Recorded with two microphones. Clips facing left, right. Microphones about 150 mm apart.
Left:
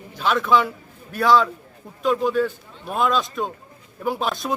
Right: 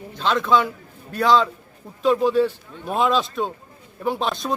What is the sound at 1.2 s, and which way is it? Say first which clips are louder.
Speech: even; 20° right (ahead or behind).